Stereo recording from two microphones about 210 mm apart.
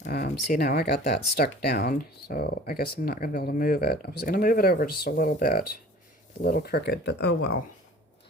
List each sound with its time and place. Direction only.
0.0 s speech: 45° left (ahead or behind)